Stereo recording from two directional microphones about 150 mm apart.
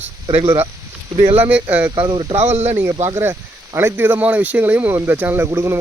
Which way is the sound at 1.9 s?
30° right (ahead or behind).